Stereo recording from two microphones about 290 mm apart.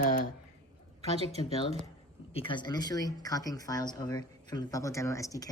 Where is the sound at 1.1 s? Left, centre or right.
Right.